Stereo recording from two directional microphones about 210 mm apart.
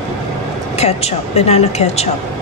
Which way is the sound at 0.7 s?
30° left (ahead or behind).